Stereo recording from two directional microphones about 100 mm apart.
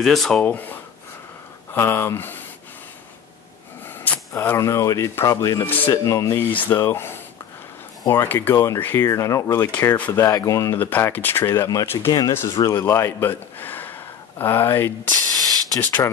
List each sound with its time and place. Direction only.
0.0 s speech: centre (ahead or behind)
0.4 s speech: 15° left (ahead or behind)
3.8 s a sound: 20° left (ahead or behind)
4.6 s speech: 30° left (ahead or behind)
5.7 s speech: 20° left (ahead or behind)
6.0 s speech: 30° left (ahead or behind)
6.5 s speech: 20° left (ahead or behind)
9.7 s speech: 20° left (ahead or behind)
10.2 s speech: 35° left (ahead or behind)
10.8 s speech: 20° left (ahead or behind)
12.1 s speech: 40° left (ahead or behind)
12.8 s speech: 25° left (ahead or behind)
15.3 s hiss: 40° right (ahead or behind)